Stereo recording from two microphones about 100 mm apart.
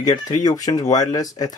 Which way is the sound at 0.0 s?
40° left (ahead or behind).